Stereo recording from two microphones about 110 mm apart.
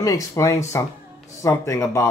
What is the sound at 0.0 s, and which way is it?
Speech, 30° left (ahead or behind).